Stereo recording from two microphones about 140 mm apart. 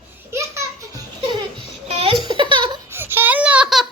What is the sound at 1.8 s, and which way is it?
Laughter, 45° right (ahead or behind).